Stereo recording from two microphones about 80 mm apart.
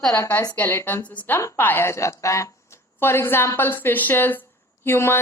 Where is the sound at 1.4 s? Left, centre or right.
Left.